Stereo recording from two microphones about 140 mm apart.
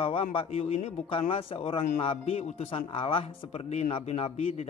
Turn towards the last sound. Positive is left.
turn(degrees=50)  # may be behind; listen again after turning